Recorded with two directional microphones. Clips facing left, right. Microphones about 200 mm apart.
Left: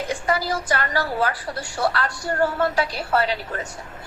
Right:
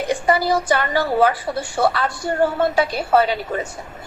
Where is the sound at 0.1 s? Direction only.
60° right (ahead or behind).